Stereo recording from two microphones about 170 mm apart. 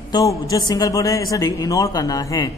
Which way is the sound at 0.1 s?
20° left (ahead or behind).